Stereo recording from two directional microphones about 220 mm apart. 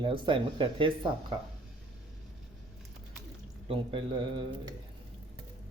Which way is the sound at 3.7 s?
25° right (ahead or behind).